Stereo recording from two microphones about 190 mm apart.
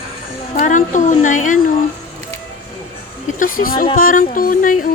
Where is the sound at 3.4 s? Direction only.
45° left (ahead or behind).